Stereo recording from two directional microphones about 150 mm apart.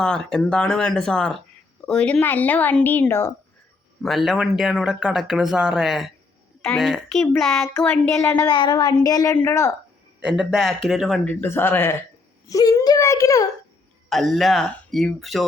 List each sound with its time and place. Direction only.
0.0 s speech: 5° left (ahead or behind)
4.0 s speech: centre (ahead or behind)
7.6 s speech: 15° left (ahead or behind)
8.4 s speech: 30° left (ahead or behind)
10.2 s a man's voice: 5° right (ahead or behind)
11.3 s speech: 10° left (ahead or behind)
14.1 s speech: centre (ahead or behind)